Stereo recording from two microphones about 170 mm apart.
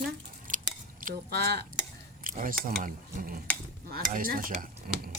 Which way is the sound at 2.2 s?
55° right (ahead or behind).